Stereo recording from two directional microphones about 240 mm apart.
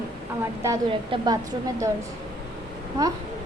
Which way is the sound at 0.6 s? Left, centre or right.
Centre.